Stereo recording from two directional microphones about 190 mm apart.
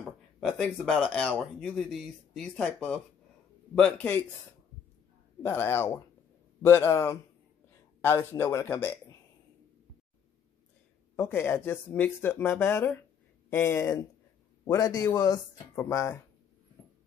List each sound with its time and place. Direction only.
0.4 s speech: centre (ahead or behind)
5.4 s speech: 10° left (ahead or behind)
11.1 s speech: 10° left (ahead or behind)